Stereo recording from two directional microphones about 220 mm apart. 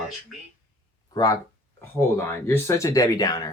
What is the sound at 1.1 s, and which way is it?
Speech, 15° left (ahead or behind).